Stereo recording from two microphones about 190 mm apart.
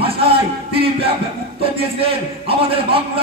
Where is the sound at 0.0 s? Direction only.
30° right (ahead or behind).